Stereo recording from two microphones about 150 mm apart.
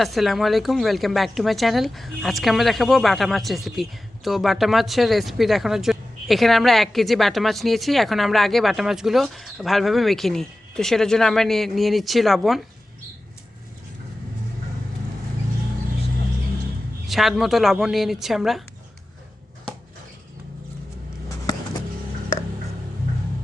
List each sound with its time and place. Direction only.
0.0 s speech: centre (ahead or behind)
17.1 s speech: centre (ahead or behind)
21.2 s a sound: 25° left (ahead or behind)